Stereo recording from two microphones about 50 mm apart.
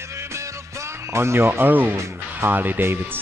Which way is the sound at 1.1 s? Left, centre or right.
Right.